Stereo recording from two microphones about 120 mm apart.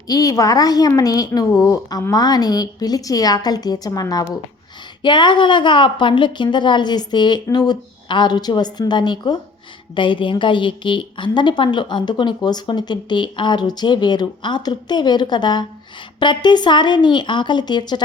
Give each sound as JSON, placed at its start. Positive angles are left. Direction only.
{"t": 0.1, "sound": "a woman's voice", "side_deg": 30}